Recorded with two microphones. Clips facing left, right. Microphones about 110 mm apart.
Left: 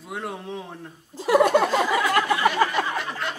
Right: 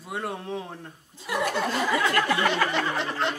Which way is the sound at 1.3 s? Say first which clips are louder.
Left 9 dB; 55° left (ahead or behind).